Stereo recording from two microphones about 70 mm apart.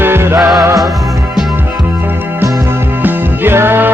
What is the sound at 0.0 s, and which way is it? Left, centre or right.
Music, right.